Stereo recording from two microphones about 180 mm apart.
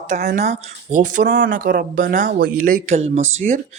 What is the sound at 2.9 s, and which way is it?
Speech, 35° right (ahead or behind).